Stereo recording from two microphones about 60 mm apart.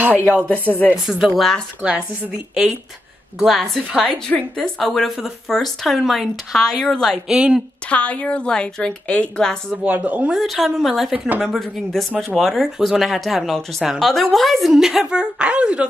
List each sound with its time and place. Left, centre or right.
0.0 s speech: right
1.0 s speech: centre
1.8 s speech: right
3.3 s speech: centre
7.3 s speech: centre
7.9 s a woman's voice: left
9.8 s speech: right
10.3 s speech: centre
11.1 s speech: right
11.4 s speech: centre